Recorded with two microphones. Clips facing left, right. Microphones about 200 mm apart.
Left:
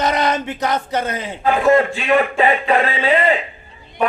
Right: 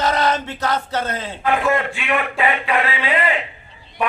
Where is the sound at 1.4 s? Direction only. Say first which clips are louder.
Left 5 dB; 35° left (ahead or behind).